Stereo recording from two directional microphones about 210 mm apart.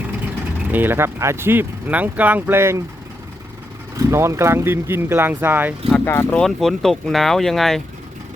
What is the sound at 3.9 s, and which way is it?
Speech, 15° right (ahead or behind).